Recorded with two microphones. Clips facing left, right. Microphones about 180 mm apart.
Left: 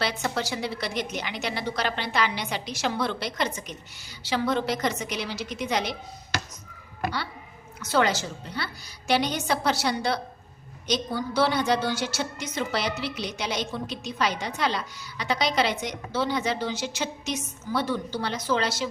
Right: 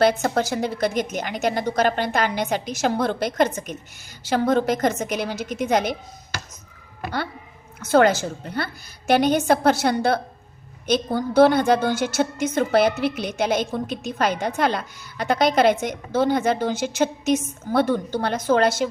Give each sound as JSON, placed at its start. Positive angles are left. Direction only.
{"t": 0.0, "sound": "a woman's voice", "side_deg": -45}
{"t": 7.8, "sound": "a woman's voice", "side_deg": -50}